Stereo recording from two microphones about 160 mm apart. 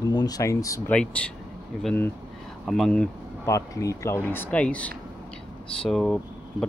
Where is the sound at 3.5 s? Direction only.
20° left (ahead or behind).